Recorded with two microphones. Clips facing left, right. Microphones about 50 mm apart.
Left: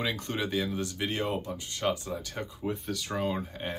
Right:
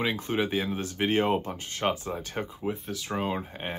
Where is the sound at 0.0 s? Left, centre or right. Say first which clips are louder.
Right 4 dB; centre.